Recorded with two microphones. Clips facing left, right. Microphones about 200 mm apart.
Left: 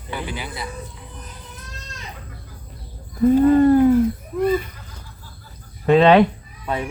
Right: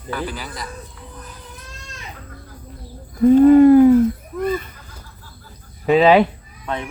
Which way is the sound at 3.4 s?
10° right (ahead or behind).